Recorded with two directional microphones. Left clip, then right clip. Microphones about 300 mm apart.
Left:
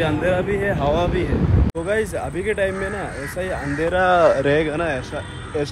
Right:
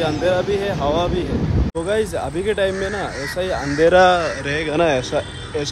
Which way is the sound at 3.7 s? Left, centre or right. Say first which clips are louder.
Right 8 dB; right.